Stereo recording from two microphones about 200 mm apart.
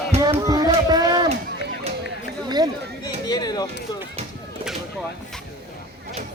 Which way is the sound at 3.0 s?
20° left (ahead or behind).